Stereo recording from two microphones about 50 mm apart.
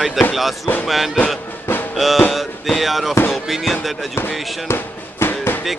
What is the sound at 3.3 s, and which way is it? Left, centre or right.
Speech, centre.